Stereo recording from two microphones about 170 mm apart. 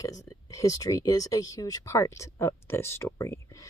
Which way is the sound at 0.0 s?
20° left (ahead or behind).